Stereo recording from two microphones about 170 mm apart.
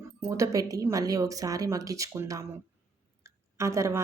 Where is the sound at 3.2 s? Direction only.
15° right (ahead or behind).